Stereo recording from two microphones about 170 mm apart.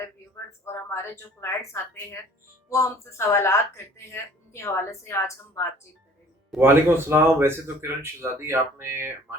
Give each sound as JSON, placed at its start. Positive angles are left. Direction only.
{"t": 0.6, "sound": "speech", "side_deg": 15}
{"t": 6.5, "sound": "speech", "side_deg": 0}
{"t": 7.1, "sound": "speech", "side_deg": -15}